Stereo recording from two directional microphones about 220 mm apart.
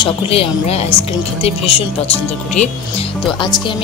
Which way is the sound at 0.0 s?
25° left (ahead or behind).